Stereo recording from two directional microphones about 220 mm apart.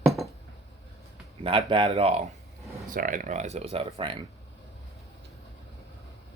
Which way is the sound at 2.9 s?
40° right (ahead or behind).